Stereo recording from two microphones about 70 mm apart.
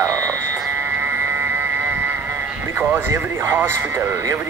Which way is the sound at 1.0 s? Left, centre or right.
Right.